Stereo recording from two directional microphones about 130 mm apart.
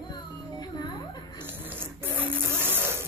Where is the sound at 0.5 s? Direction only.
30° left (ahead or behind).